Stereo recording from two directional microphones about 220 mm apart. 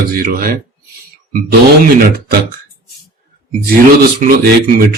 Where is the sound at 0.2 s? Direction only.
40° right (ahead or behind).